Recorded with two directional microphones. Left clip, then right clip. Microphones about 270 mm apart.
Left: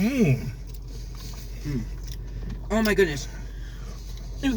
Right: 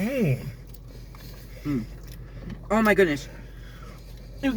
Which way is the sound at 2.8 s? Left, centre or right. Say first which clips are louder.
Right 2 dB; centre.